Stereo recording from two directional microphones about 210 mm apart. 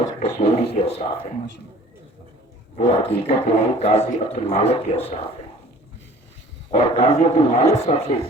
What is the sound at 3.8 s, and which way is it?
Speech, 30° left (ahead or behind).